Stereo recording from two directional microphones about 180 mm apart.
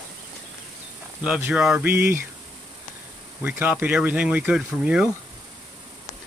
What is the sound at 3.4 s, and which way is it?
Speech, 10° right (ahead or behind).